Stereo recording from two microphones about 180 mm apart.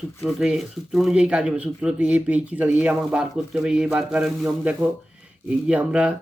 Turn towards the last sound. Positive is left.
turn(degrees=-5)  # may be behind; listen again after turning